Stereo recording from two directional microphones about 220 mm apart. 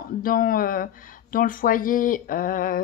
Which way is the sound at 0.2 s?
40° left (ahead or behind).